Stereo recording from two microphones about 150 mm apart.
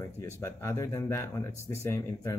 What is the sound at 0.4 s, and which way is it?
Speech, 20° left (ahead or behind).